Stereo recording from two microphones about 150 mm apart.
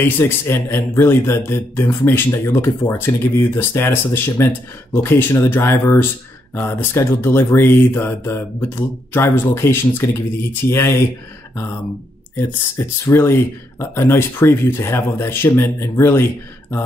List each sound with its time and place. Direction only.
0.0 s speech: 15° left (ahead or behind)
12.4 s speech: 20° left (ahead or behind)